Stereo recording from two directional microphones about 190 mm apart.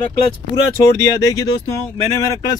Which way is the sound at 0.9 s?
15° left (ahead or behind).